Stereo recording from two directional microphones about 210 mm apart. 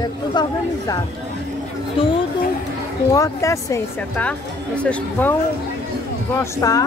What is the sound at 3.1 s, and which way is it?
A woman's voice, 15° left (ahead or behind).